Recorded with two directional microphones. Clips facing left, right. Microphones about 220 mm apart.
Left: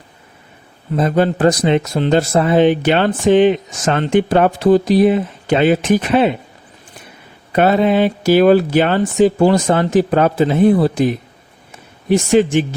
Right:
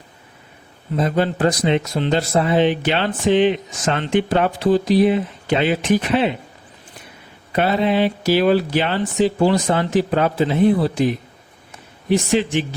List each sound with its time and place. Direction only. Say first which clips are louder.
0.9 s speech: left 4 dB; 50° left (ahead or behind)
7.5 s speech: left 5 dB; 50° left (ahead or behind)